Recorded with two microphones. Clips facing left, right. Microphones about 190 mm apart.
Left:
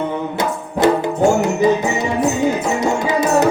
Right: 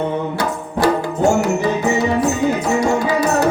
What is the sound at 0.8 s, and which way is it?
Music, 20° left (ahead or behind).